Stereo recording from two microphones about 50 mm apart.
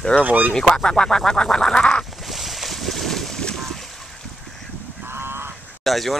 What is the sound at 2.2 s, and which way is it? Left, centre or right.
Boat, centre.